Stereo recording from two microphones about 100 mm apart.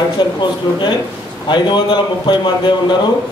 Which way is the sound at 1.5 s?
50° left (ahead or behind).